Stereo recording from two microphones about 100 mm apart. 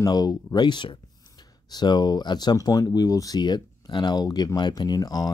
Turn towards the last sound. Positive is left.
turn(degrees=40)  # may be behind; listen again after turning